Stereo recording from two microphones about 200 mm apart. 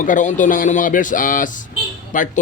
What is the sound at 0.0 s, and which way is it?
Speech, 40° left (ahead or behind).